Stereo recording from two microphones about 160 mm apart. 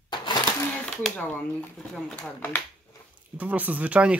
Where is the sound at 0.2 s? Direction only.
25° left (ahead or behind).